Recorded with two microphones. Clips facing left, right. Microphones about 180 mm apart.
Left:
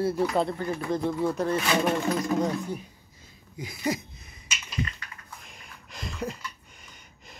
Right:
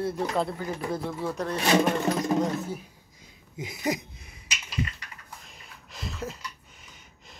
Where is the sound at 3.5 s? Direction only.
20° right (ahead or behind).